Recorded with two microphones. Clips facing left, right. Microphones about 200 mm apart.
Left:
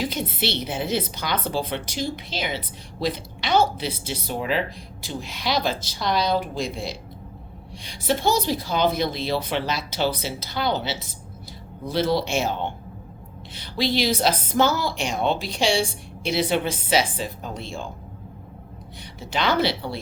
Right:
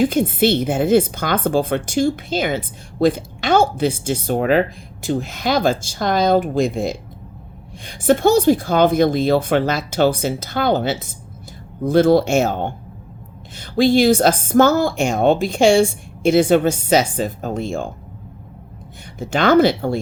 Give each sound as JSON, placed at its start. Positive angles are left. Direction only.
{"t": 0.0, "sound": "a woman's voice", "side_deg": -50}
{"t": 19.2, "sound": "a woman's voice", "side_deg": -45}